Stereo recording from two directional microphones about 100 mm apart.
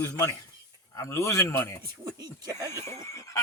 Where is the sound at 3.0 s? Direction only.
30° left (ahead or behind).